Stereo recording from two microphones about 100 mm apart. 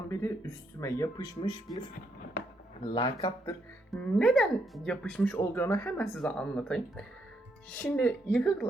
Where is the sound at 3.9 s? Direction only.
10° left (ahead or behind); by 5.9 s 25° left (ahead or behind).